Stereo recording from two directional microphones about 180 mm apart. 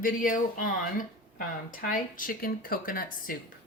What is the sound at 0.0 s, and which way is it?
A woman's voice, 50° left (ahead or behind).